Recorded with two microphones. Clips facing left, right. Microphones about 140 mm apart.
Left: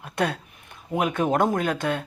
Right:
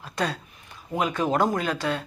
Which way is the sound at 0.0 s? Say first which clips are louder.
Left 2 dB; 55° left (ahead or behind).